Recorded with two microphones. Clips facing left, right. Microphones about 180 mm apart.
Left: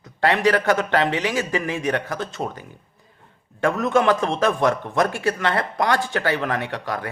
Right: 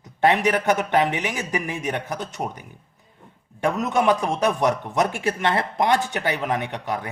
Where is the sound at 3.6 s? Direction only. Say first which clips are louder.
Left 2 dB; 20° right (ahead or behind).